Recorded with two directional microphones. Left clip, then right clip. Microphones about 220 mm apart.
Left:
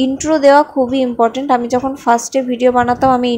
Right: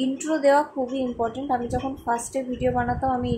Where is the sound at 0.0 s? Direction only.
30° left (ahead or behind).